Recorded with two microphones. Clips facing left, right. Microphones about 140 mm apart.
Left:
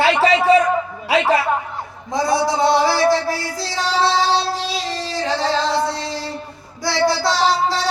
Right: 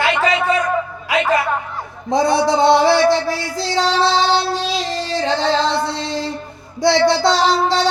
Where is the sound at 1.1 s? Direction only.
30° left (ahead or behind).